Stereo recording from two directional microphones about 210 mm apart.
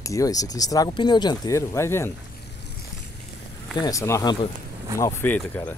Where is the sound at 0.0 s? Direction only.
15° left (ahead or behind).